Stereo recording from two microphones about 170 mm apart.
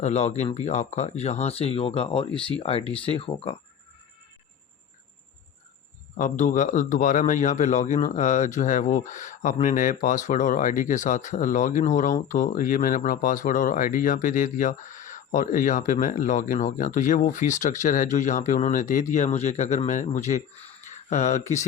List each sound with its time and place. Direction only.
0.0 s speech: 40° left (ahead or behind)
6.1 s a man's voice: 45° left (ahead or behind)